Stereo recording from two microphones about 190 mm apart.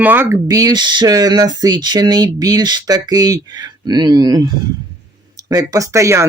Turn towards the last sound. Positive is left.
turn(degrees=-15)  # may be behind; listen again after turning